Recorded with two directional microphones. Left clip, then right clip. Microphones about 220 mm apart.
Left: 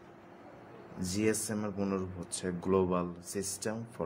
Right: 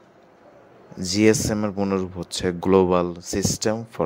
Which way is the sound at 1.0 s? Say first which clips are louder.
Right 14 dB; 35° right (ahead or behind).